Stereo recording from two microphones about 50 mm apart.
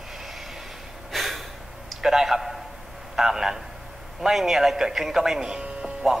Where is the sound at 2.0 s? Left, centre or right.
Centre.